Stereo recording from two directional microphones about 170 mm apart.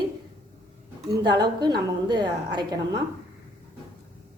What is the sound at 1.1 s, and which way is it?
A woman's voice, 25° right (ahead or behind).